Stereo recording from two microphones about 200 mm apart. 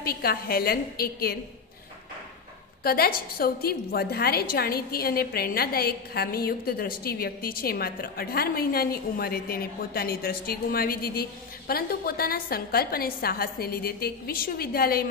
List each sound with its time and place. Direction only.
0.0 s a woman's voice: 50° left (ahead or behind)
2.8 s a woman's voice: 50° left (ahead or behind)